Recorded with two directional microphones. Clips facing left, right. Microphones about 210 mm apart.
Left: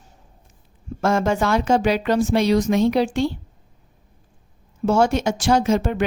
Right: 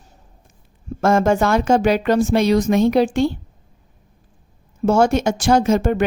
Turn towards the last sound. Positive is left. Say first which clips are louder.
# right 3 dB
turn(degrees=-50)  # may be behind; listen again after turning